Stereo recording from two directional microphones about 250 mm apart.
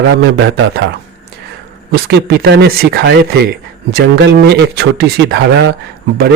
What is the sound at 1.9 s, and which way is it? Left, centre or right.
Speech, right.